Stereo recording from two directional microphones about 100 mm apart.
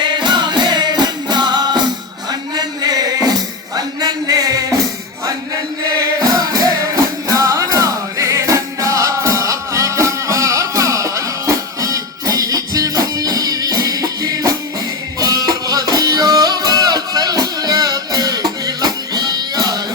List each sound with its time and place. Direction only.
0.0 s music: 50° right (ahead or behind)
3.8 s a sound: 40° right (ahead or behind)
6.2 s music: 40° right (ahead or behind)